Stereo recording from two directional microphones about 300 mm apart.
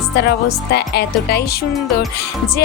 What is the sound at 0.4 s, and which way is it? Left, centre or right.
Speech, left.